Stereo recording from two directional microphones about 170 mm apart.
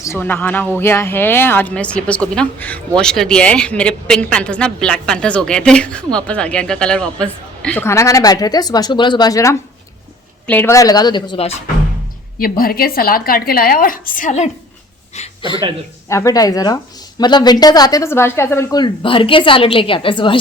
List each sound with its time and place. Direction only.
0.0 s speech: 15° left (ahead or behind); by 11.5 s 30° left (ahead or behind)
12.4 s a woman's voice: 60° left (ahead or behind); by 14.5 s 45° left (ahead or behind)
15.4 s a man's voice: 30° left (ahead or behind)
16.0 s speech: 20° left (ahead or behind)